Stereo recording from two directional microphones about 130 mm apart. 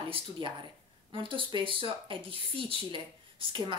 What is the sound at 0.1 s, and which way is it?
Speech, 40° right (ahead or behind).